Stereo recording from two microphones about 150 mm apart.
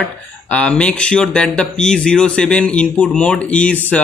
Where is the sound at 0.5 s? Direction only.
5° left (ahead or behind).